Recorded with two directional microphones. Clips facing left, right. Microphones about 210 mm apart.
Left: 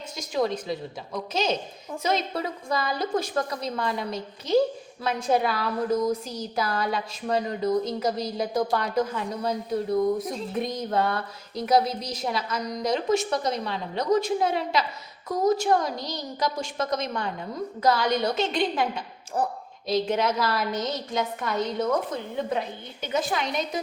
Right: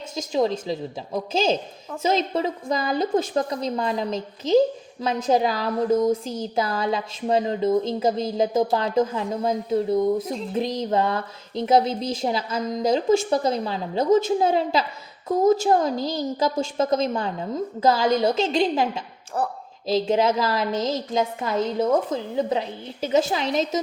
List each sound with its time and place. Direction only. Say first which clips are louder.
0.2 s a woman's voice: right 4 dB; 25° right (ahead or behind)
23.1 s a woman's voice: right 5 dB; 30° right (ahead or behind)